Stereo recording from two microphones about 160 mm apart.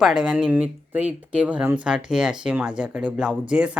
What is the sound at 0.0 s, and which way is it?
A woman's voice, 5° right (ahead or behind).